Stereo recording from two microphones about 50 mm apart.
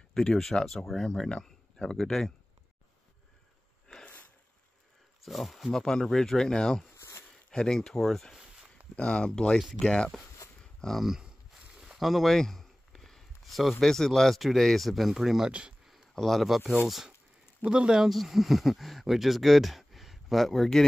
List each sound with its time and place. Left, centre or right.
0.1 s speech: centre
4.0 s sniff: left
5.2 s speech: centre
7.0 s a sound: left
7.5 s speech: centre
8.9 s speech: left
9.6 s speech: centre
9.8 s speech: centre
10.6 s a sound: centre
11.0 s a sound: centre
13.7 s speech: centre
16.2 s speech: centre
17.6 s speech: centre
18.1 s speech: centre